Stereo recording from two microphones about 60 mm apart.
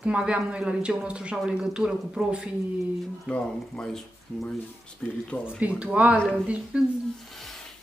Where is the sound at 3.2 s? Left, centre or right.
Centre.